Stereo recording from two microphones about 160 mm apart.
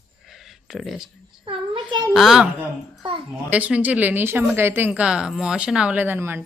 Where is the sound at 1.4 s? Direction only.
30° right (ahead or behind).